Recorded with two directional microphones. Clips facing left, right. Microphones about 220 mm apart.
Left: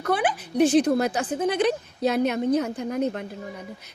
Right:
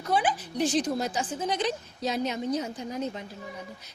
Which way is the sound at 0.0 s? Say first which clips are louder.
Left 3 dB; 65° left (ahead or behind).